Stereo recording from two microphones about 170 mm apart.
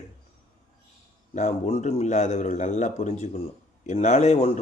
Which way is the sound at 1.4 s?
40° left (ahead or behind).